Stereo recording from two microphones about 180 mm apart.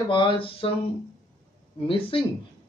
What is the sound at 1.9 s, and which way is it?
Speech, 30° left (ahead or behind).